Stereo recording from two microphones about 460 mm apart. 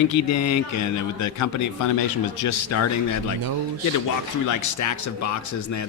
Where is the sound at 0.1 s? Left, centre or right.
Left.